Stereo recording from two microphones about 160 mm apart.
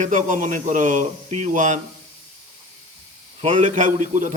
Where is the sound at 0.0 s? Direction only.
50° right (ahead or behind).